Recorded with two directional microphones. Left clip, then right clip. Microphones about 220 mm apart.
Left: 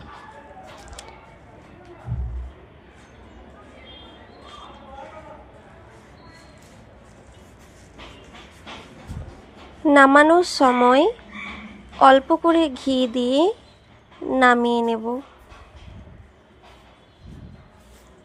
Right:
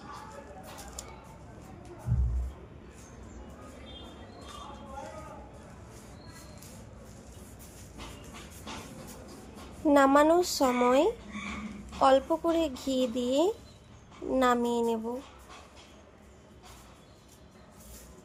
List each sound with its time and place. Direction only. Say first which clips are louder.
9.8 s speech: left 9 dB; 15° left (ahead or behind)